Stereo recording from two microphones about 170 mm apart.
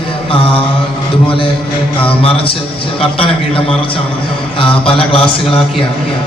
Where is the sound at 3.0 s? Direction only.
35° left (ahead or behind).